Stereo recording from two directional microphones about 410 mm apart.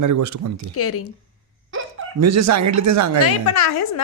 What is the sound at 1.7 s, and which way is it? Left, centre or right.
Speech, right.